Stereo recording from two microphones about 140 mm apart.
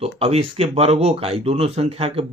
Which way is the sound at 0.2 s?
45° right (ahead or behind).